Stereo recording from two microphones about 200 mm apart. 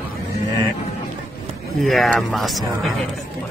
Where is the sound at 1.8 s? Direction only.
Centre (ahead or behind).